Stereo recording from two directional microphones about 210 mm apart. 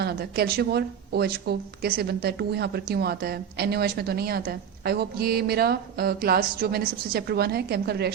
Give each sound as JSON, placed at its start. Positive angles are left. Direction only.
{"t": 0.0, "sound": "speech", "side_deg": -50}